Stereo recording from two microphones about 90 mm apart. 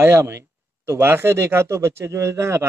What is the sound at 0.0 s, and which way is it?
Speech, 30° right (ahead or behind).